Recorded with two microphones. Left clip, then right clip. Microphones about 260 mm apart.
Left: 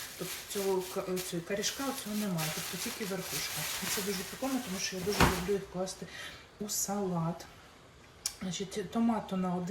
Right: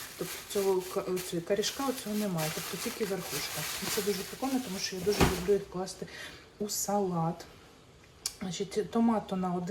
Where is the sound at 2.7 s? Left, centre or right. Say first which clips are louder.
Right 3 dB; centre.